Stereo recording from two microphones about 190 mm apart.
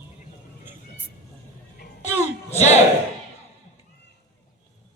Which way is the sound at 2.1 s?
35° left (ahead or behind).